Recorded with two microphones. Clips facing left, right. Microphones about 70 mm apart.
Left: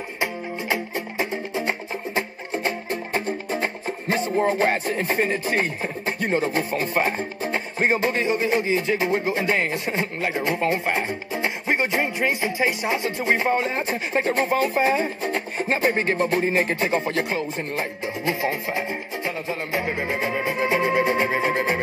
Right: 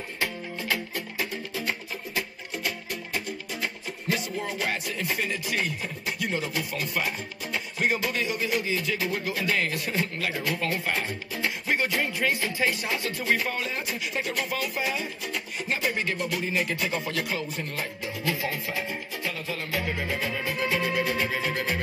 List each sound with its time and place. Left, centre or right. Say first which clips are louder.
0.2 s music: left 4 dB; left